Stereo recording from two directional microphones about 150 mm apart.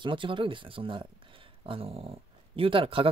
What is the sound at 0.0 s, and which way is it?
Speech, 35° right (ahead or behind).